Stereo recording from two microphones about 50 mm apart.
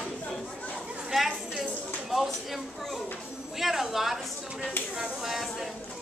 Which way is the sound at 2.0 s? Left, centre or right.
Centre.